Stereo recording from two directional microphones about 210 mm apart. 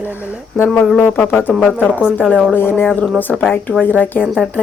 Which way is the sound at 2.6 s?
10° left (ahead or behind).